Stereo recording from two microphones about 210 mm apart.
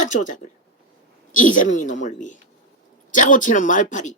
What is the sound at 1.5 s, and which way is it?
Speech, 40° left (ahead or behind).